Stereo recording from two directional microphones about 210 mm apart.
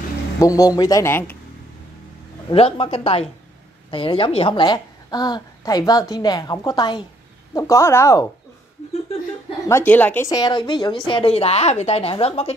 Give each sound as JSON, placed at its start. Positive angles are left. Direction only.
{"t": 0.4, "sound": "speech", "side_deg": 15}
{"t": 2.5, "sound": "a woman's voice", "side_deg": 30}
{"t": 9.7, "sound": "a woman's voice", "side_deg": 10}